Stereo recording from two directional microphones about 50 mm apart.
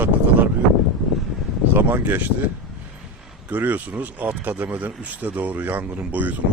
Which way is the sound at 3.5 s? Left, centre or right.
Right.